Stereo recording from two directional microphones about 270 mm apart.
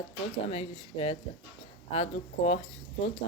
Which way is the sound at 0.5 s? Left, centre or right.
Left.